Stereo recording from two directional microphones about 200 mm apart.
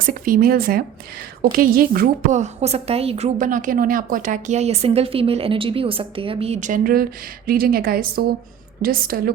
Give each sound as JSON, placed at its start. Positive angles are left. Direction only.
{"t": 0.0, "sound": "a woman's voice", "side_deg": -45}